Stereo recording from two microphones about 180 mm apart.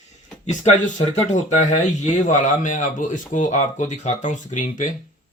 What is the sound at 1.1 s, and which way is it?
Speech, 40° left (ahead or behind).